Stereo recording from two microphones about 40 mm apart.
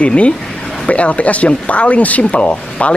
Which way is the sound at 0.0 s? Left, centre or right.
Left.